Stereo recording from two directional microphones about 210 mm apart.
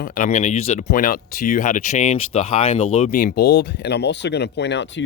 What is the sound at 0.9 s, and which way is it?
Speech, 40° left (ahead or behind).